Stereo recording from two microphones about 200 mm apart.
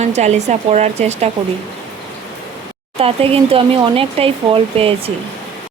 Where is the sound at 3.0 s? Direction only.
30° right (ahead or behind).